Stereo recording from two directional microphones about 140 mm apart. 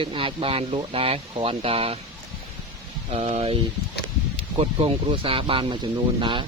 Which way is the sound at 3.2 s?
55° right (ahead or behind).